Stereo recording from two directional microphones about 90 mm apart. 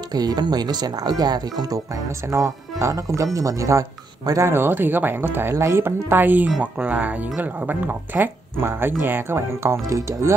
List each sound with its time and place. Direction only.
0.1 s speech: 50° right (ahead or behind)
2.2 s speech: 35° right (ahead or behind)